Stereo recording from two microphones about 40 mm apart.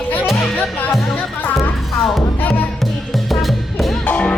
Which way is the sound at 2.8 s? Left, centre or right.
Centre.